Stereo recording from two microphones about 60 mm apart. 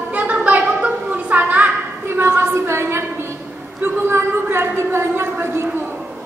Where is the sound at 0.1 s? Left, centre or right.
Right.